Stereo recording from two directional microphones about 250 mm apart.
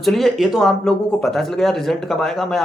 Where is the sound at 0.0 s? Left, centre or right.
Centre.